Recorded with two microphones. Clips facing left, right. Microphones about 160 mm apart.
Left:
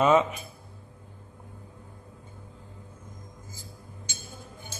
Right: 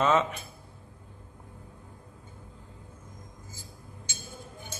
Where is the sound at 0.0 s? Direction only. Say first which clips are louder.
Left 3 dB; 15° left (ahead or behind).